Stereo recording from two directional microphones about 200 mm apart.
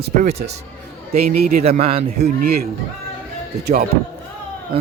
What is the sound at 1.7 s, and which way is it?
Speech, 30° right (ahead or behind).